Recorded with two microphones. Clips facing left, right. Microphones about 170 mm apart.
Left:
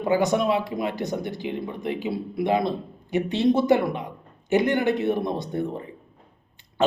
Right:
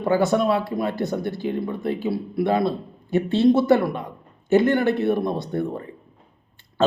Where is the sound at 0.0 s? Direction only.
15° left (ahead or behind).